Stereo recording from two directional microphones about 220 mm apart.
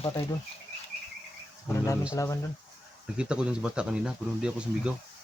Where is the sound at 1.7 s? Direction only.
15° left (ahead or behind).